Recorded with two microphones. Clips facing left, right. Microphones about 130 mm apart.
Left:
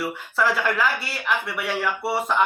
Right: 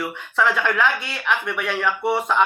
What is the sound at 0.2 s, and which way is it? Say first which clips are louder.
Speech: right 3 dB; 5° left (ahead or behind).